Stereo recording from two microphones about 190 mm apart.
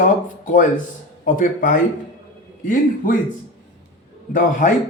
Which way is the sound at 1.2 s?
45° left (ahead or behind).